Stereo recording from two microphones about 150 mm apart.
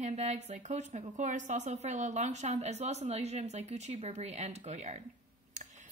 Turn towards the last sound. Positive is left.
turn(degrees=-50)  # may be behind; listen again after turning